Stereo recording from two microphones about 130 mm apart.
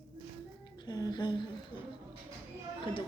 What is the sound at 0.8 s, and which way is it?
Speech, 30° left (ahead or behind).